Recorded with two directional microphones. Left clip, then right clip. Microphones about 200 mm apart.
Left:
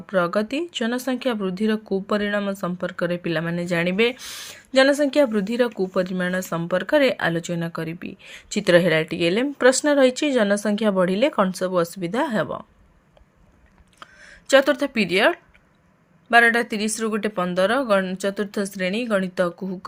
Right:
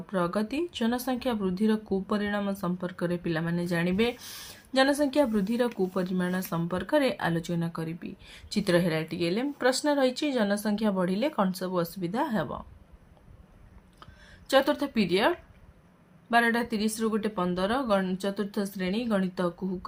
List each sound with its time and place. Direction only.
0.1 s speech: 25° left (ahead or behind)
14.5 s speech: 25° left (ahead or behind)
16.3 s speech: 25° left (ahead or behind)